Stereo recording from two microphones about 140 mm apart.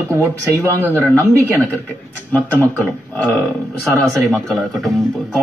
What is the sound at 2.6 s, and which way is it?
Speech, 20° right (ahead or behind).